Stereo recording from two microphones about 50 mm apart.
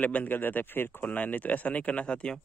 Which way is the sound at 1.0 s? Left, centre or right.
Left.